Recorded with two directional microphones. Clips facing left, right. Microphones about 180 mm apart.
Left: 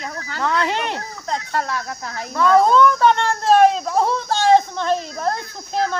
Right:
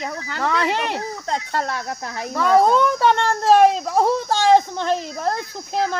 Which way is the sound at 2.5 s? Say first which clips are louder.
Left 1 dB; 15° right (ahead or behind).